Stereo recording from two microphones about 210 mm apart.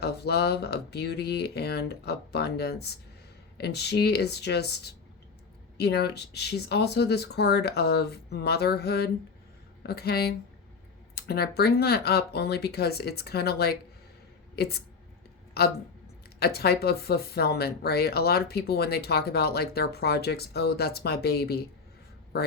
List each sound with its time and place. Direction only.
0.0 s speech: 50° left (ahead or behind)
16.4 s a man's voice: 50° left (ahead or behind)